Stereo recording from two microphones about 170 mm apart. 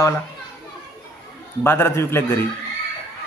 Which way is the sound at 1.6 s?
15° left (ahead or behind).